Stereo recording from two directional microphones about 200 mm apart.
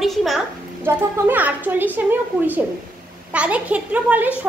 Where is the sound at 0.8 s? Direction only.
10° right (ahead or behind).